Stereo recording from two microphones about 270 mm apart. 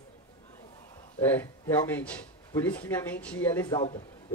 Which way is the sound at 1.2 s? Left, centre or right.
Centre.